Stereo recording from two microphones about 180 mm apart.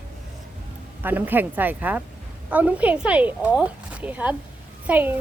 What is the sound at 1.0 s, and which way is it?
A woman's voice, 10° right (ahead or behind).